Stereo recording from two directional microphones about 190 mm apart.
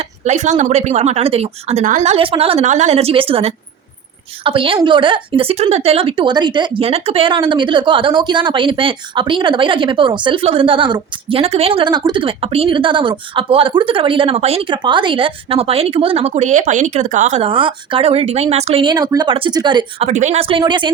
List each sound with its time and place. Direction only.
0.0 s a woman's voice: 35° right (ahead or behind)